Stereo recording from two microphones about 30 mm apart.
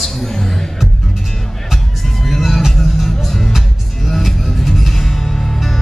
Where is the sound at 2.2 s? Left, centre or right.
Centre.